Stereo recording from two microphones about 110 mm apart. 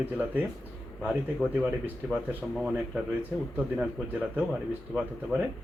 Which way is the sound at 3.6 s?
15° right (ahead or behind).